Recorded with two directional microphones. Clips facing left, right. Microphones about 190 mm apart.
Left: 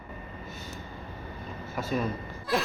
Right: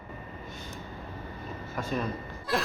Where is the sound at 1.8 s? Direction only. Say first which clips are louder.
Left 2 dB; 5° left (ahead or behind).